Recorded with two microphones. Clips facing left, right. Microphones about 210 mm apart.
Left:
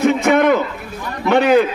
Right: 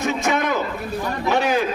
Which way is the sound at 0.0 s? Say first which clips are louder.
Left 8 dB; 60° left (ahead or behind).